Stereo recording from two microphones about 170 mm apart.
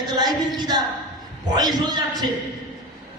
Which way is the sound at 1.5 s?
25° right (ahead or behind).